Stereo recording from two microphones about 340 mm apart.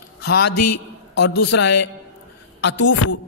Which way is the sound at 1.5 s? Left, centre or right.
Left.